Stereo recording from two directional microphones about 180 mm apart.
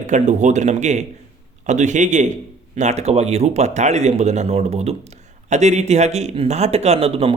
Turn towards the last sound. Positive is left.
turn(degrees=-35)  # may be behind; listen again after turning